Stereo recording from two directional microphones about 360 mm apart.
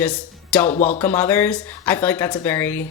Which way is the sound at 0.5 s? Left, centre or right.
Centre.